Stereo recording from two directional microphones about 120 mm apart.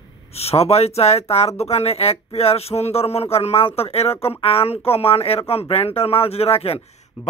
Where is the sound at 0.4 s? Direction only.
60° left (ahead or behind).